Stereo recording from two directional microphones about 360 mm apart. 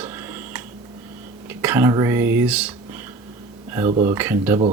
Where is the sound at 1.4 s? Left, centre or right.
Centre.